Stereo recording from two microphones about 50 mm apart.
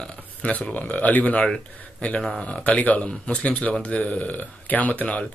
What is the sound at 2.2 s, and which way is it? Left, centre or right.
Speech, centre.